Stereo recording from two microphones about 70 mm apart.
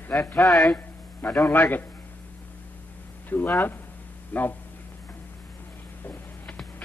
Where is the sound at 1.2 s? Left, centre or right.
Centre.